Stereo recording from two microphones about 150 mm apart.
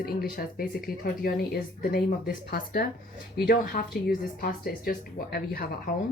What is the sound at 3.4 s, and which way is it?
Speech, 70° left (ahead or behind).